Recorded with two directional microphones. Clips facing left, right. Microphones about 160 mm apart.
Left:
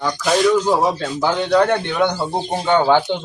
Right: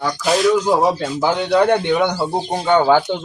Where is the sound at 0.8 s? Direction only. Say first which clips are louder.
Right 2 dB; 15° right (ahead or behind).